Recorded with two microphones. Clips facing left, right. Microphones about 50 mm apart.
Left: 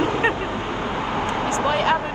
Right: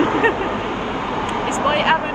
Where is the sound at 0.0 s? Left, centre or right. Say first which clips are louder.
Right 4 dB; right.